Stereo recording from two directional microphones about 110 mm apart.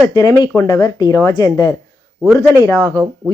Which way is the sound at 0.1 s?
35° left (ahead or behind).